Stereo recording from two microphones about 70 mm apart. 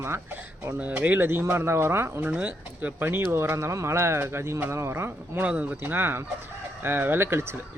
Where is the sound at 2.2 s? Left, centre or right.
Right.